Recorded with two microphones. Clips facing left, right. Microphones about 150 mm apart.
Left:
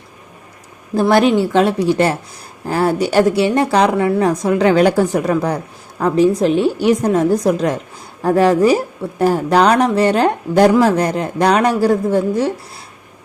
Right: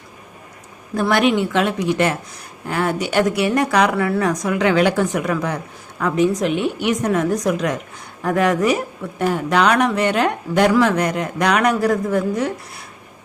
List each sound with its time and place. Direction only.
1.1 s speech: 35° left (ahead or behind)